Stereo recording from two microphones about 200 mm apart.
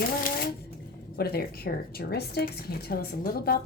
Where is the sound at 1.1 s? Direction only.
50° left (ahead or behind).